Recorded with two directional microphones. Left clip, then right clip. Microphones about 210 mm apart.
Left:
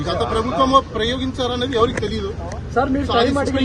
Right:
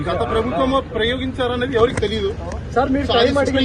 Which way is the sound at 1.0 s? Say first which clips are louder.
Right 1 dB; 45° left (ahead or behind).